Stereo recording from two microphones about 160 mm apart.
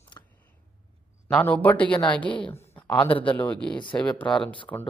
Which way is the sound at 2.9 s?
30° left (ahead or behind).